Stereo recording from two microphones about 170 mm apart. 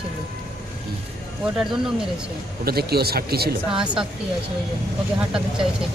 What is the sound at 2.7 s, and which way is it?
Speech, 65° right (ahead or behind).